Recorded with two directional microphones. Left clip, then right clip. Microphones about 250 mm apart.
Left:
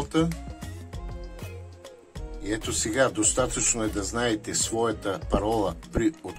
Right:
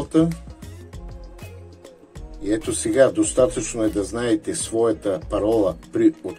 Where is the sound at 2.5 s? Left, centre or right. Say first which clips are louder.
Right 6 dB; centre.